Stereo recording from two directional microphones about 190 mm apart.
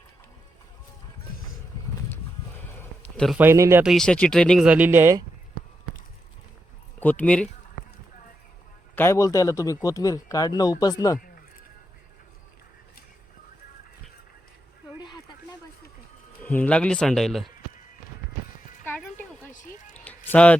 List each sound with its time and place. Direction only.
2.7 s a sound: 5° left (ahead or behind)
3.3 s speech: 10° right (ahead or behind)
3.8 s speech: 5° left (ahead or behind); by 5.2 s 15° right (ahead or behind)
7.0 s speech: 10° left (ahead or behind)
9.0 s speech: 15° left (ahead or behind)
15.0 s a sound: 20° left (ahead or behind)
16.4 s speech: 10° left (ahead or behind)
20.1 s music: 10° left (ahead or behind)